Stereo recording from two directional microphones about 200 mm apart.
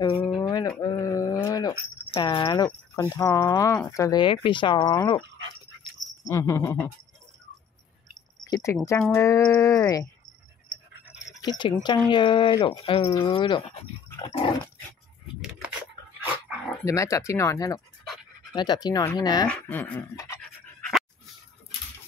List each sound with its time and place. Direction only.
0.4 s speech: 20° left (ahead or behind)
6.3 s speech: 15° left (ahead or behind)
8.5 s speech: 20° left (ahead or behind)
11.1 s speech: 20° left (ahead or behind)
16.2 s dog: 5° right (ahead or behind)
16.8 s speech: 15° left (ahead or behind)
19.5 s pant: 10° left (ahead or behind)